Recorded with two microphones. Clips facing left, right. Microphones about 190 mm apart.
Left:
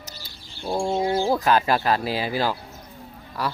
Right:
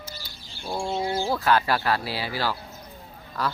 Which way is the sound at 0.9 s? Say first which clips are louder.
Left 4 dB; 20° left (ahead or behind).